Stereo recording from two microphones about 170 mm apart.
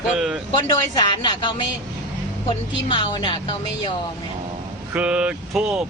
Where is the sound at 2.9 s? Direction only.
30° left (ahead or behind).